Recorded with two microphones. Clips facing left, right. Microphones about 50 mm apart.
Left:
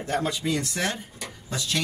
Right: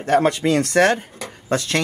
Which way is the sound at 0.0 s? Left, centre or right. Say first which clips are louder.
Right 10 dB; right.